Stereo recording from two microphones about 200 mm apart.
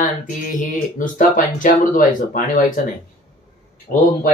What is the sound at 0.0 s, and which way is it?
Speech, 40° left (ahead or behind).